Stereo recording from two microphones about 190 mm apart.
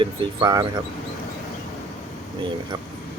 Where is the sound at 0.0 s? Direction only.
25° right (ahead or behind).